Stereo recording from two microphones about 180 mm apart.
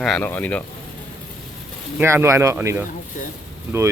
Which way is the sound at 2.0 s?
15° right (ahead or behind).